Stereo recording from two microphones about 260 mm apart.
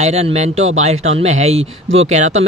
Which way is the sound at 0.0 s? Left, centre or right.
Right.